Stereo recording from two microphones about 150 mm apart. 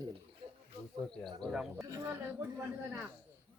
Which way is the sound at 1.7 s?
20° right (ahead or behind).